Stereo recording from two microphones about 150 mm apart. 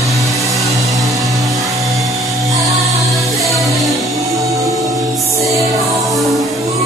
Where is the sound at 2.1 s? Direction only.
20° right (ahead or behind).